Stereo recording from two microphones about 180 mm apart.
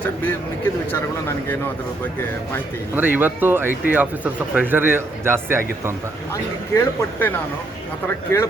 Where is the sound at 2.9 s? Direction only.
10° right (ahead or behind).